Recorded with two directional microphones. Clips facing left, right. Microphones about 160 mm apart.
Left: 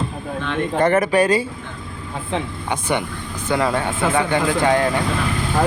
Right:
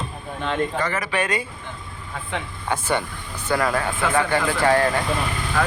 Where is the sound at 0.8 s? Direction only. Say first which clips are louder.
Left 9 dB; 50° left (ahead or behind); by 1.5 s 35° left (ahead or behind).